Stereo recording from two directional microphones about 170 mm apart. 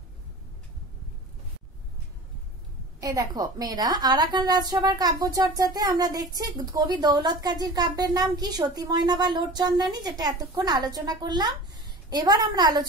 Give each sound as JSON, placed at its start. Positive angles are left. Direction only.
{"t": 3.0, "sound": "a woman's voice", "side_deg": -20}